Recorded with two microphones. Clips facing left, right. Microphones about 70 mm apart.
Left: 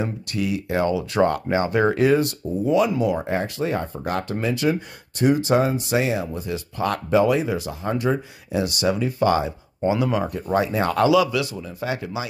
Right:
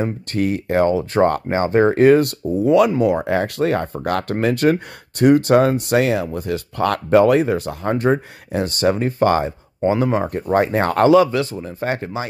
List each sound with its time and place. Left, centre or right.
0.0 s speech: right
10.5 s speech: right